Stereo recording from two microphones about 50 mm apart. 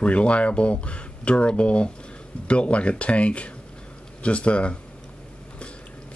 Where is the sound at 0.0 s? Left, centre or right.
Left.